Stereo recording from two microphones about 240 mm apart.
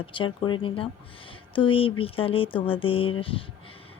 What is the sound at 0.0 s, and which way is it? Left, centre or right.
Speech, left.